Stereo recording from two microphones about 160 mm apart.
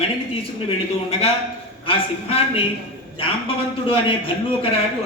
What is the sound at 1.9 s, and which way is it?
Speech, 35° left (ahead or behind).